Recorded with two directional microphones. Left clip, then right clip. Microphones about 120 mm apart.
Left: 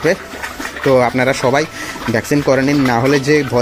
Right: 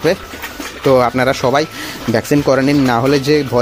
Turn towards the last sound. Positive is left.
turn(degrees=-5)  # may be behind; listen again after turning